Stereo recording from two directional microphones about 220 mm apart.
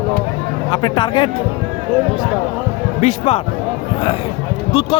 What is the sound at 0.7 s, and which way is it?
Speech, 20° left (ahead or behind).